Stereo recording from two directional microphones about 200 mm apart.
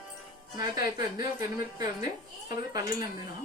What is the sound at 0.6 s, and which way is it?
A woman's voice, 20° right (ahead or behind).